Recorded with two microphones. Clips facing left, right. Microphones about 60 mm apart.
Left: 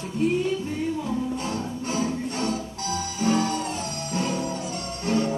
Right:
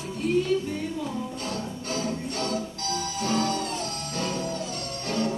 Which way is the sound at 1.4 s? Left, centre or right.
Left.